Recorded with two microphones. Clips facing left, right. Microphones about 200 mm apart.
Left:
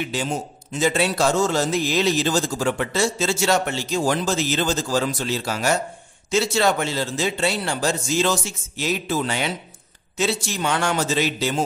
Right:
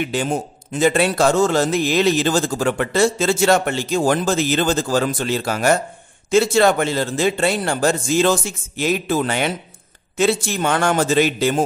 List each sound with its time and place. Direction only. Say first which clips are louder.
0.1 s a man's voice: right 4 dB; 55° right (ahead or behind)